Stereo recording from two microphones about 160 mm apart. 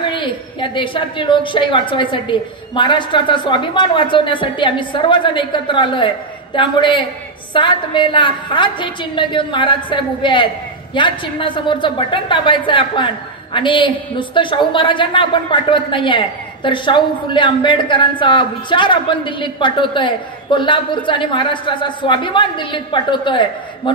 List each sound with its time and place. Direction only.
0.0 s a woman's voice: 30° left (ahead or behind)